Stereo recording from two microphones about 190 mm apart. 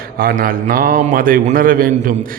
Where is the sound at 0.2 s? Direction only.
50° right (ahead or behind).